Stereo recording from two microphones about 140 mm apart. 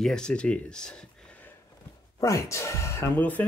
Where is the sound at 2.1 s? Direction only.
20° left (ahead or behind).